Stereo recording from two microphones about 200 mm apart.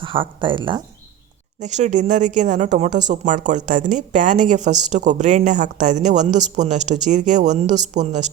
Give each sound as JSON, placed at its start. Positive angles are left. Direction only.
{"t": 0.0, "sound": "speech", "side_deg": -25}
{"t": 1.5, "sound": "speech", "side_deg": -35}